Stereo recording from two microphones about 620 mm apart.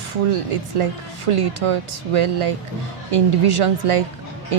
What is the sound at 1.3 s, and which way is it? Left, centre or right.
A woman's voice, right.